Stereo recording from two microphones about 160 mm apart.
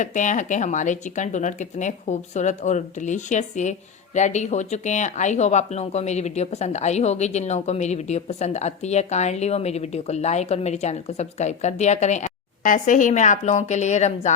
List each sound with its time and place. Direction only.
0.0 s speech: 50° left (ahead or behind)